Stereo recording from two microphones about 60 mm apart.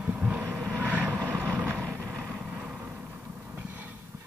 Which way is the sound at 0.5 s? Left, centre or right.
Right.